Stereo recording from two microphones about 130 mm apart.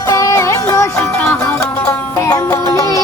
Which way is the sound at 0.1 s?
25° left (ahead or behind).